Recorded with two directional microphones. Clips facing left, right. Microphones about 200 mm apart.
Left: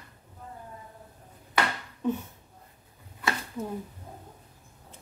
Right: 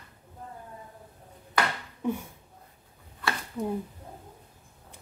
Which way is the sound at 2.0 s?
10° right (ahead or behind).